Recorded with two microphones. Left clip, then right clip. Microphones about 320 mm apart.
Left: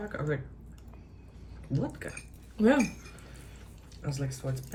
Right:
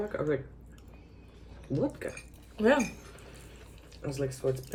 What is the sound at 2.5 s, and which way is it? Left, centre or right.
Speech, centre.